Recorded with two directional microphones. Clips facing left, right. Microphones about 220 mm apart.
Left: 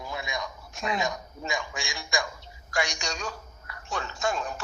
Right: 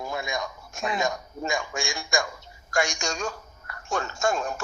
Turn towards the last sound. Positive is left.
turn(degrees=-45)  # may be behind; listen again after turning